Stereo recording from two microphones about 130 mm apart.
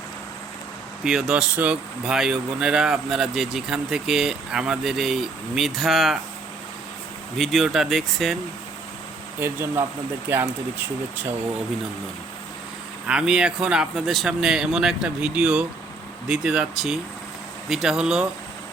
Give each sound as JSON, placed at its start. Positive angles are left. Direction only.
{"t": 1.0, "sound": "speech", "side_deg": -5}
{"t": 7.3, "sound": "speech", "side_deg": 0}
{"t": 9.4, "sound": "speech", "side_deg": -20}
{"t": 13.1, "sound": "speech", "side_deg": -5}